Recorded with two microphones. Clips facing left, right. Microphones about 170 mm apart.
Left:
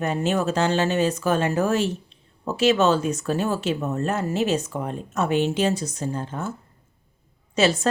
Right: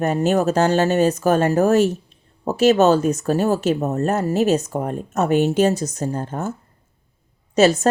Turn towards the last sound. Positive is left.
turn(degrees=-45)  # may be behind; listen again after turning